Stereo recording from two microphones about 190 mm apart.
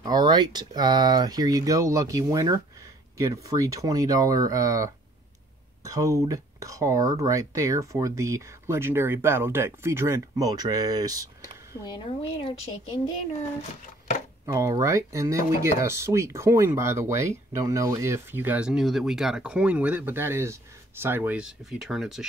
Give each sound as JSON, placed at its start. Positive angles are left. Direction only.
{"t": 0.0, "sound": "speech", "side_deg": -20}
{"t": 11.8, "sound": "speech", "side_deg": 25}
{"t": 14.4, "sound": "speech", "side_deg": -15}